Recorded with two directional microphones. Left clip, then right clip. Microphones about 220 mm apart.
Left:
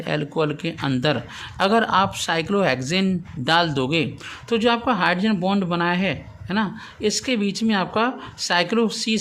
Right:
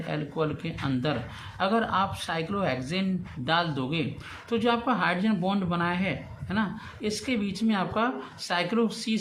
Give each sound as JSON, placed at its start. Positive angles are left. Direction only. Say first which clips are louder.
{"t": 0.0, "sound": "a man's voice", "louder": "left 7 dB", "side_deg": 50}